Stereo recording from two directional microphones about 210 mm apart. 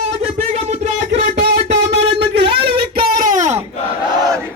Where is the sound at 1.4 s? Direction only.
55° right (ahead or behind).